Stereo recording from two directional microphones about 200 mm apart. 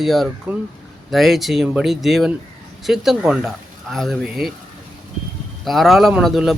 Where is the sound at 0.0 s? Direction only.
Centre (ahead or behind).